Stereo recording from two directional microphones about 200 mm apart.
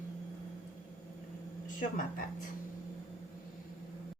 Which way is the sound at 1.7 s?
40° left (ahead or behind).